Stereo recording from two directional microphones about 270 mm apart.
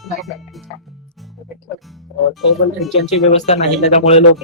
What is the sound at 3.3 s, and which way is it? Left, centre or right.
Speech, left.